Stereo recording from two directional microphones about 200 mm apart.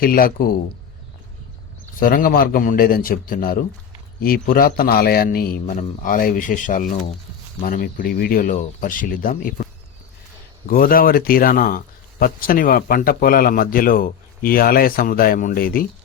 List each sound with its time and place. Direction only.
0.0 s a man's voice: 45° left (ahead or behind)
2.0 s a man's voice: 45° left (ahead or behind)
10.7 s a man's voice: 45° left (ahead or behind)